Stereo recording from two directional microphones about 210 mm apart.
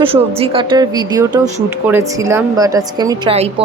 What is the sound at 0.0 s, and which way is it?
Speech, 25° right (ahead or behind).